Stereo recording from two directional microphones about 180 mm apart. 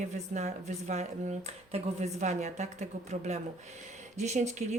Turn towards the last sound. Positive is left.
turn(degrees=-40)  # may be behind; listen again after turning